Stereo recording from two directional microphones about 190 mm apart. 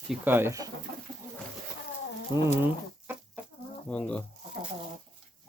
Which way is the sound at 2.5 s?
10° right (ahead or behind).